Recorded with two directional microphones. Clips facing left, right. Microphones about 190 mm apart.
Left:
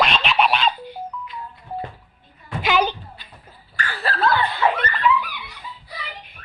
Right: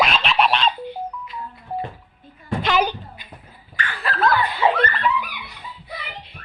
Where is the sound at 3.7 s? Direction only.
35° left (ahead or behind).